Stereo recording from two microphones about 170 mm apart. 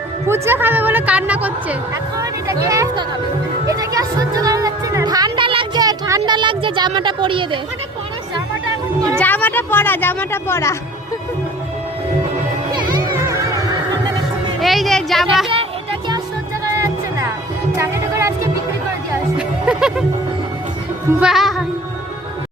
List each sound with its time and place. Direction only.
0.3 s a woman's voice: 15° right (ahead or behind)
2.6 s speech: 20° right (ahead or behind)
9.1 s speech: 10° left (ahead or behind)
13.1 s a sound: 15° right (ahead or behind)
14.6 s speech: centre (ahead or behind)
17.7 s music: 15° right (ahead or behind)
19.4 s music: 5° right (ahead or behind)
21.2 s a woman's voice: centre (ahead or behind)